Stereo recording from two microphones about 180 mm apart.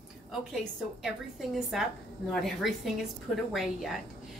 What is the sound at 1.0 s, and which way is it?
A woman's voice, centre (ahead or behind).